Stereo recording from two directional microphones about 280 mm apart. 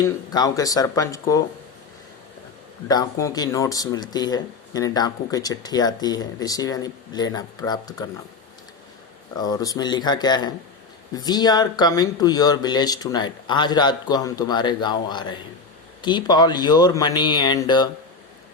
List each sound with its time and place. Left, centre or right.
0.0 s speech: centre
2.8 s speech: centre
9.3 s speech: centre